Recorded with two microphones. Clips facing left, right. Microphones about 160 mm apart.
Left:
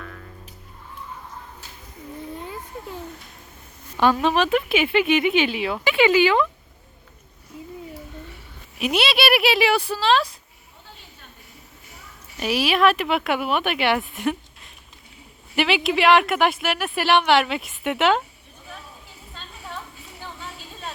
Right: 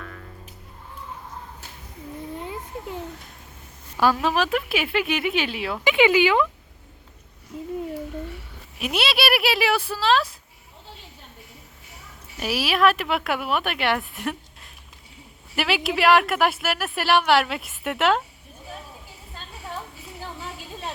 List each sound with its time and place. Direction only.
0.0 s music: centre (ahead or behind)
2.4 s a sound: 20° right (ahead or behind)
3.9 s speech: 5° right (ahead or behind)
5.8 s speech: 15° right (ahead or behind)
8.8 s speech: centre (ahead or behind)
12.4 s speech: 5° right (ahead or behind)
15.5 s speech: centre (ahead or behind)